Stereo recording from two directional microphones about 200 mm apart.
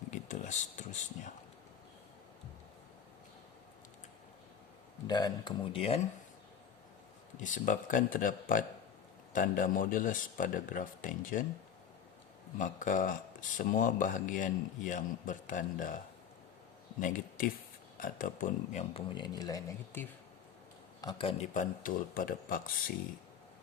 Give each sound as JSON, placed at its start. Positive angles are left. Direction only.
{"t": 0.1, "sound": "speech", "side_deg": 35}
{"t": 5.0, "sound": "speech", "side_deg": 20}
{"t": 7.4, "sound": "a man's voice", "side_deg": 40}
{"t": 12.5, "sound": "a man's voice", "side_deg": 40}
{"t": 17.0, "sound": "a man's voice", "side_deg": 40}
{"t": 19.1, "sound": "speech", "side_deg": 20}
{"t": 21.0, "sound": "speech", "side_deg": 25}
{"t": 21.5, "sound": "a man's voice", "side_deg": 40}